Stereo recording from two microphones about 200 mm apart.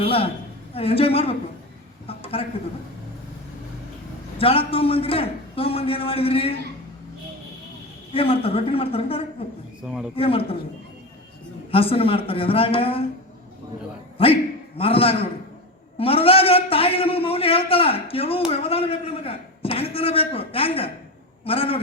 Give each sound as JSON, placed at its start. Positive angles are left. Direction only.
{"t": 0.0, "sound": "a man's voice", "side_deg": 30}
{"t": 2.0, "sound": "a sound", "side_deg": 30}
{"t": 4.4, "sound": "a man's voice", "side_deg": 30}
{"t": 8.1, "sound": "a man's voice", "side_deg": 30}
{"t": 9.8, "sound": "a man's voice", "side_deg": -5}
{"t": 10.2, "sound": "a man's voice", "side_deg": 30}
{"t": 11.7, "sound": "a man's voice", "side_deg": 30}
{"t": 14.2, "sound": "a man's voice", "side_deg": 25}